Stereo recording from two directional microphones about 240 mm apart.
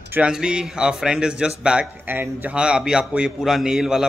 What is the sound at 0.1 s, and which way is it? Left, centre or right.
Speech, centre.